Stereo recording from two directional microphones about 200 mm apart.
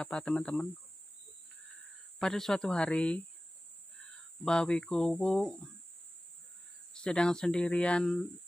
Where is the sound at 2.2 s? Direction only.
Centre (ahead or behind).